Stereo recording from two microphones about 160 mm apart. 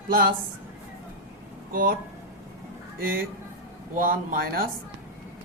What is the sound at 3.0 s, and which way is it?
Speech, 65° right (ahead or behind).